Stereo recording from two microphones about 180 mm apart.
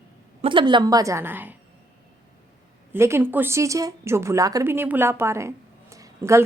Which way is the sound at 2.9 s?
15° right (ahead or behind).